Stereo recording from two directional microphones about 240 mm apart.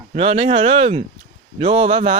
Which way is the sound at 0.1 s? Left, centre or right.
Right.